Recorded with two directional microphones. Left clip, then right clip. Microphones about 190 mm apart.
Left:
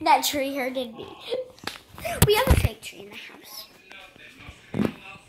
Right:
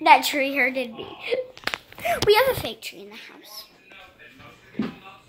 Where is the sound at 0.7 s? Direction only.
25° right (ahead or behind).